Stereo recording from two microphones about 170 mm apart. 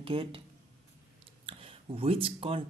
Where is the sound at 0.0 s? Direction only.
30° right (ahead or behind).